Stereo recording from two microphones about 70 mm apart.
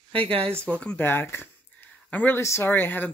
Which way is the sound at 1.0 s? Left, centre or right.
Left.